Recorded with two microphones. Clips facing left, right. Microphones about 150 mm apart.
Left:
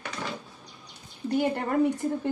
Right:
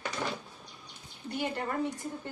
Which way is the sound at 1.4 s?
55° left (ahead or behind).